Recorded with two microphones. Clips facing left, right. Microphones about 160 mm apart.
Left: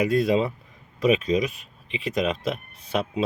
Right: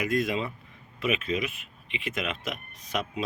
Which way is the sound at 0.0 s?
35° left (ahead or behind).